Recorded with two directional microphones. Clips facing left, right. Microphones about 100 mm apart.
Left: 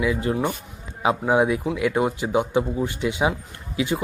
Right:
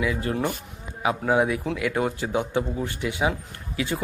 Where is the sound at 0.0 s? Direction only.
20° left (ahead or behind).